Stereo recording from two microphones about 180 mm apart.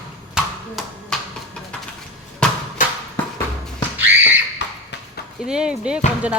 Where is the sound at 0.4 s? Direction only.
5° right (ahead or behind).